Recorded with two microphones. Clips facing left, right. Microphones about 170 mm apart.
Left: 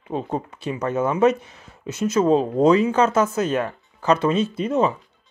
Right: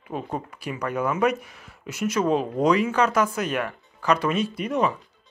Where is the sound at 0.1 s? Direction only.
25° left (ahead or behind).